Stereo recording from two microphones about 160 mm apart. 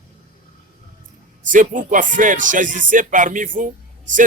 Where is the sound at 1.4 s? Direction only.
55° right (ahead or behind).